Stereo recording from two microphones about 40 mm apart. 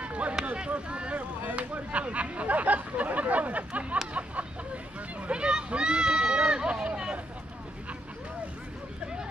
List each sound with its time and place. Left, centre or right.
0.0 s run: right
0.7 s speech: right
5.3 s a sound: right